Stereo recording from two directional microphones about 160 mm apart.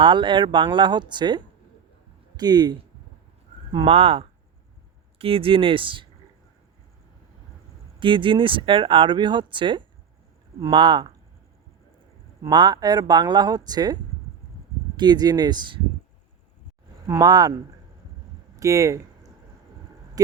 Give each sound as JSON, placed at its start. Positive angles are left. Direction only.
{"t": 0.0, "sound": "speech", "side_deg": -30}
{"t": 7.9, "sound": "speech", "side_deg": -30}
{"t": 12.4, "sound": "speech", "side_deg": -25}
{"t": 17.1, "sound": "speech", "side_deg": -20}
{"t": 18.5, "sound": "speech", "side_deg": -20}